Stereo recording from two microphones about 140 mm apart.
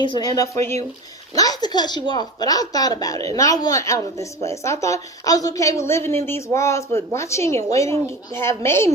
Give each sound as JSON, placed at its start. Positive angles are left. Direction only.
{"t": 0.0, "sound": "a woman's voice", "side_deg": 30}